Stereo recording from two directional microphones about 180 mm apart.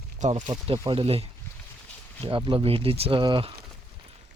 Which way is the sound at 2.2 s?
30° right (ahead or behind).